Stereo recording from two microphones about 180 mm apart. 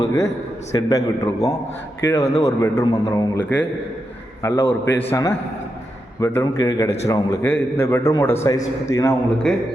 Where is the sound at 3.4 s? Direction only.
10° left (ahead or behind).